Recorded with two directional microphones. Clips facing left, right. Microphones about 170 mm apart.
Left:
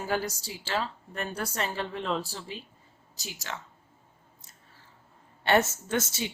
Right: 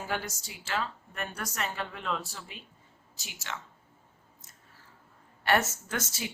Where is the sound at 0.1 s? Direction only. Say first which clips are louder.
Left 6 dB; 35° left (ahead or behind).